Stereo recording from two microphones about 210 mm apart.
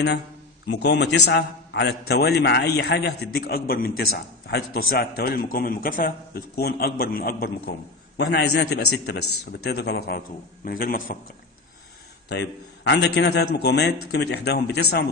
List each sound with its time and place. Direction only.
0.7 s a man's voice: 55° left (ahead or behind)
12.3 s a man's voice: 55° left (ahead or behind)